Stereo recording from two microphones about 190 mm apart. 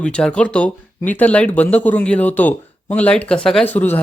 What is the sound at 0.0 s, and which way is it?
Speech, 5° left (ahead or behind).